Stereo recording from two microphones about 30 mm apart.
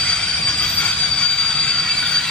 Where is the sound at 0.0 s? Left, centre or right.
Left.